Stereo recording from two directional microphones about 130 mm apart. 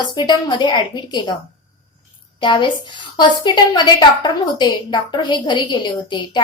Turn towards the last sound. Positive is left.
turn(degrees=35)  # may be behind; listen again after turning